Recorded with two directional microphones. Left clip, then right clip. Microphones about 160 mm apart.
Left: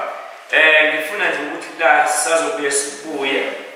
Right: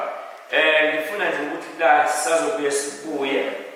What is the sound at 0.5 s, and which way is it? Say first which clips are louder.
A man's voice: left 5 dB; 10° right (ahead or behind).